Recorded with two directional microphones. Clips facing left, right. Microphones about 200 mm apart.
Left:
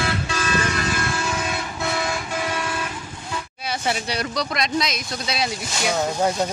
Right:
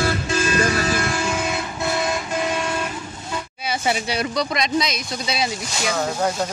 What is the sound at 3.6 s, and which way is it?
Speech, centre (ahead or behind).